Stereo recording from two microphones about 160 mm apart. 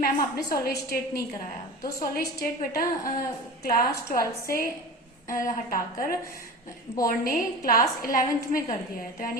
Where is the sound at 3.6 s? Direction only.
60° left (ahead or behind).